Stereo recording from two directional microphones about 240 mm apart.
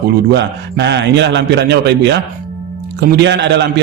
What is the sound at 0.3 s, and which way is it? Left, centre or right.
A man's voice, right.